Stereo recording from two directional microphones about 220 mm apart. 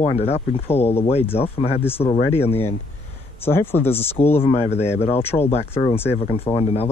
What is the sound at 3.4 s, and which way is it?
Speech, 10° left (ahead or behind).